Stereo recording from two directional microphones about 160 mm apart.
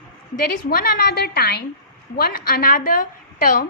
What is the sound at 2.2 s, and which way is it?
A woman's voice, 75° left (ahead or behind).